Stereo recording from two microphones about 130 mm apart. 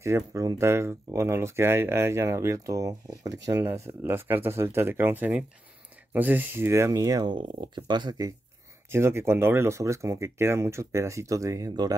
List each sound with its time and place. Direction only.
0.0 s speech: 20° right (ahead or behind)
8.9 s speech: 20° right (ahead or behind)